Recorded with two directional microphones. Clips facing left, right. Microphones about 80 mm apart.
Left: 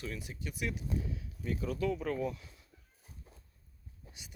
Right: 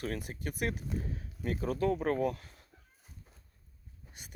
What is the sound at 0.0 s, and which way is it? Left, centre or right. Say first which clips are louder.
Speech: right 5 dB; right.